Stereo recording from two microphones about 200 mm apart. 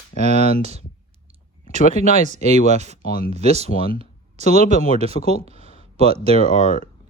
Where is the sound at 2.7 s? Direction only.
35° right (ahead or behind).